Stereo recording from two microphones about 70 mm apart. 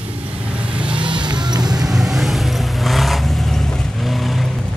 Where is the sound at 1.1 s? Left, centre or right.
Right.